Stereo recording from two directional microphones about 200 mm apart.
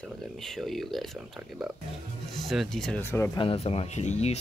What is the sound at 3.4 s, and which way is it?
Speech, 30° left (ahead or behind).